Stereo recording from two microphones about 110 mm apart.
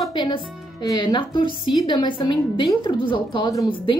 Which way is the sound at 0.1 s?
45° left (ahead or behind).